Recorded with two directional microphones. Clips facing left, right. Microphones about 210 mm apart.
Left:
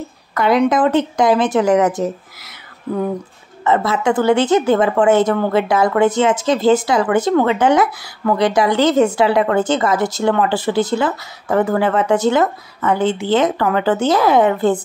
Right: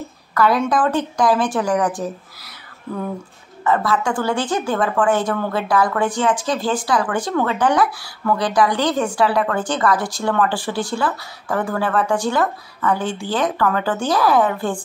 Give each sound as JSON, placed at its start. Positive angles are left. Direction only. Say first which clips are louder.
{"t": 0.3, "sound": "a woman's voice", "louder": "left 3 dB", "side_deg": 20}
{"t": 3.6, "sound": "a woman's voice", "louder": "left 3 dB", "side_deg": 20}